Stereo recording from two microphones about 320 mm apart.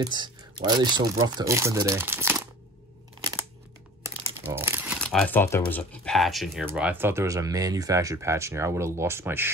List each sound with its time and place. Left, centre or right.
0.0 s speech: centre
4.0 s crumpling: centre
5.0 s speech: centre